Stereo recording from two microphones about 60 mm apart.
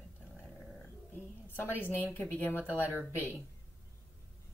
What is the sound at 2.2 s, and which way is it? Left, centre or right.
Speech, left.